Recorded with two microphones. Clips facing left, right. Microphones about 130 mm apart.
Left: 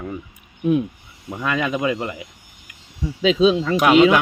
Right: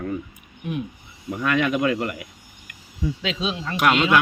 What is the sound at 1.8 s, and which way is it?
Speech, 20° left (ahead or behind).